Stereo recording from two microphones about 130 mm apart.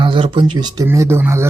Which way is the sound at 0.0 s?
40° right (ahead or behind).